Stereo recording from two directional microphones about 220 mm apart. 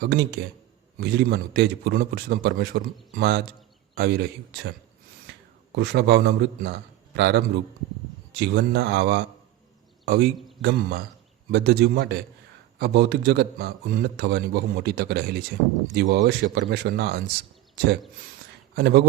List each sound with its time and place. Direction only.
0.0 s a man's voice: 45° right (ahead or behind)
5.7 s a man's voice: 50° right (ahead or behind)
18.8 s a man's voice: 50° right (ahead or behind)